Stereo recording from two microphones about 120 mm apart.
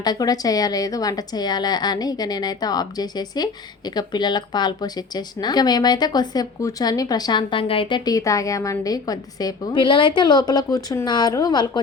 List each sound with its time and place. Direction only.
0.0 s a woman's voice: 35° left (ahead or behind)